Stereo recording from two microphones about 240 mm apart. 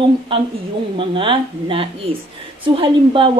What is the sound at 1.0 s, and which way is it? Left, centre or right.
A woman's voice, right.